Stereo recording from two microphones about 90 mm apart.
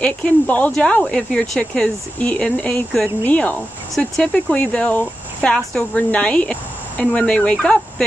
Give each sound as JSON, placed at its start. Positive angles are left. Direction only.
{"t": 0.0, "sound": "speech", "side_deg": 15}